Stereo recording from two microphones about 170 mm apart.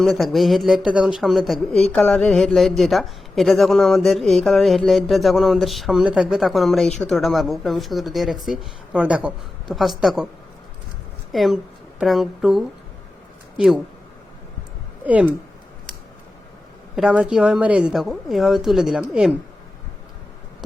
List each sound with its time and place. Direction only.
0.0 s speech: centre (ahead or behind)
11.3 s a woman's voice: centre (ahead or behind)
15.0 s speech: 10° right (ahead or behind)
16.9 s speech: 5° right (ahead or behind)